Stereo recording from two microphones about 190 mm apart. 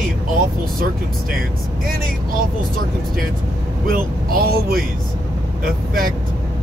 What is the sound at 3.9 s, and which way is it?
Speech, 50° right (ahead or behind).